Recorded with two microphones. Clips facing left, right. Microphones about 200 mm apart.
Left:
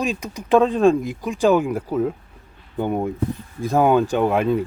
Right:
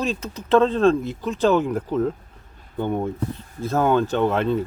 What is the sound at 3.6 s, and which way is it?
Speech, 15° left (ahead or behind).